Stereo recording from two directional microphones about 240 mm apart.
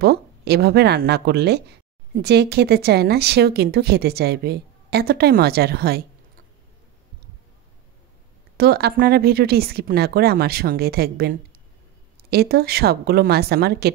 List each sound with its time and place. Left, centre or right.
0.0 s speech: right
8.5 s speech: right